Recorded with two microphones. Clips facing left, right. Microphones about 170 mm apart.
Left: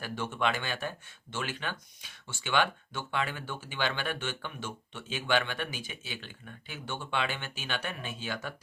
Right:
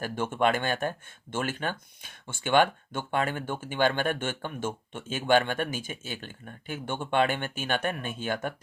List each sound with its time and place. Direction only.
0.0 s speech: 50° right (ahead or behind)